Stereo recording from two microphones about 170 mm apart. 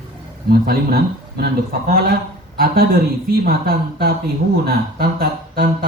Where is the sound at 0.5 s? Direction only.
60° right (ahead or behind).